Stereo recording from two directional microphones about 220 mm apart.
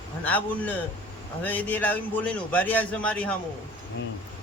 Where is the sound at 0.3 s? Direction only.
5° left (ahead or behind).